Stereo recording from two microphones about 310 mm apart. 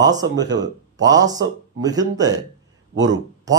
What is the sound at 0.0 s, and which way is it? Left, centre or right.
Speech, centre.